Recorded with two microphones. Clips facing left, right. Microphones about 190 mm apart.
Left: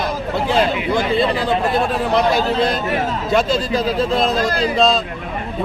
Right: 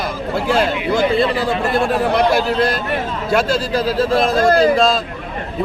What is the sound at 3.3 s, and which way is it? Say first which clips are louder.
Speech: right 1 dB; 5° right (ahead or behind).